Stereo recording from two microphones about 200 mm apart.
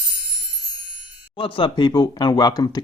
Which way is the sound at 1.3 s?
25° left (ahead or behind).